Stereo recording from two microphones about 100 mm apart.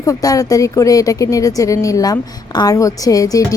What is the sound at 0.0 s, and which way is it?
Speech, 35° left (ahead or behind).